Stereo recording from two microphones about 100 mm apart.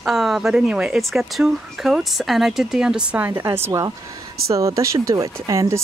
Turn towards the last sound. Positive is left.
turn(degrees=-30)  # may be behind; listen again after turning